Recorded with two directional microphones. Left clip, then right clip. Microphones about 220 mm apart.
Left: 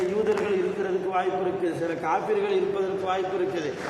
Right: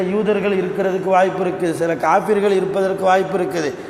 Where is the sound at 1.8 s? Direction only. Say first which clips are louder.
Right 12 dB; 50° right (ahead or behind).